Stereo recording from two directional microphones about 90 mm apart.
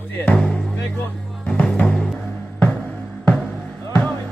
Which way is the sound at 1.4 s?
10° left (ahead or behind).